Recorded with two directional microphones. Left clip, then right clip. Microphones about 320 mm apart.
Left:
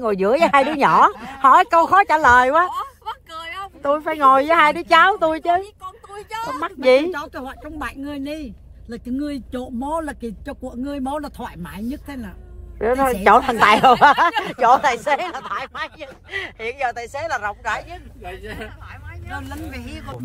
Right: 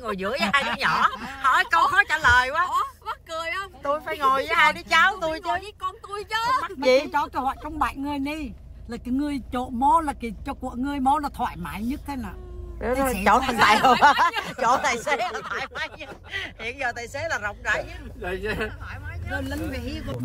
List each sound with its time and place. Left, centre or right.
0.1 s speech: centre
2.7 s a sound: centre
4.0 s speech: left
6.6 s speech: left
7.1 s speech: centre
12.8 s speech: left; by 17.8 s centre